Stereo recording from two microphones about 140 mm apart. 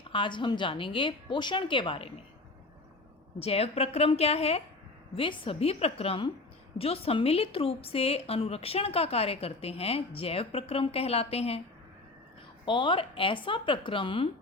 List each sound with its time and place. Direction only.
0.1 s speech: 35° left (ahead or behind)
3.4 s a woman's voice: 45° left (ahead or behind)
12.6 s speech: 35° left (ahead or behind)